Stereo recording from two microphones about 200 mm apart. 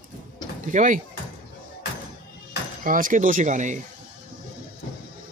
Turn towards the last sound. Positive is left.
turn(degrees=-40)  # may be behind; listen again after turning